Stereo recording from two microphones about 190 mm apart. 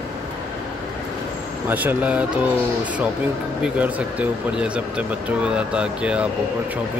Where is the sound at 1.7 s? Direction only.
10° right (ahead or behind).